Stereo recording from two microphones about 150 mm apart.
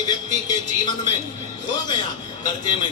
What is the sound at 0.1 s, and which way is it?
A man's voice, 30° left (ahead or behind).